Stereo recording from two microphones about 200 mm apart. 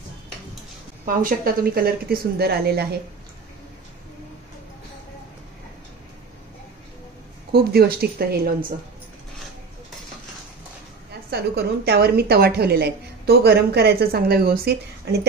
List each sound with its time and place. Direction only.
1.0 s a woman's voice: 45° right (ahead or behind)
7.5 s a woman's voice: 50° right (ahead or behind)
11.2 s a woman's voice: 55° right (ahead or behind)